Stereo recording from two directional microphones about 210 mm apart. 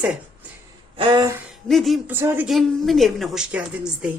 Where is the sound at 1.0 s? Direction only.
20° right (ahead or behind).